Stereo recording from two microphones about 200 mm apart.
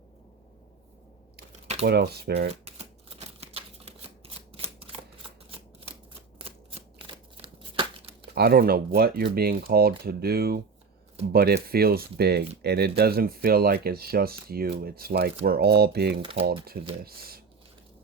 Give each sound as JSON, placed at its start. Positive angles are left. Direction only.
{"t": 1.8, "sound": "speech", "side_deg": -55}
{"t": 2.5, "sound": "shuffling cards", "side_deg": -30}
{"t": 4.4, "sound": "a sound", "side_deg": -30}
{"t": 6.4, "sound": "a sound", "side_deg": -25}
{"t": 8.4, "sound": "speech", "side_deg": -50}
{"t": 16.2, "sound": "speech", "side_deg": -25}
{"t": 17.0, "sound": "speech", "side_deg": -50}